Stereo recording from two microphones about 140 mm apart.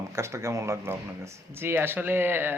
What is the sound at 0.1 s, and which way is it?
A man's voice, 20° right (ahead or behind).